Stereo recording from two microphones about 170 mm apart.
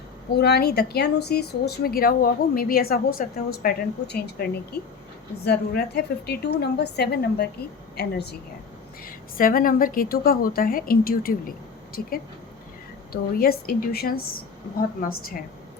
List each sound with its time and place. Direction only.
0.3 s a woman's voice: 70° left (ahead or behind)
9.0 s a woman's voice: 55° left (ahead or behind)
13.4 s a woman's voice: 65° left (ahead or behind)